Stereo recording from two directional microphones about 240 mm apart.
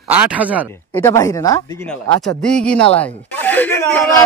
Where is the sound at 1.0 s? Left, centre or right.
Centre.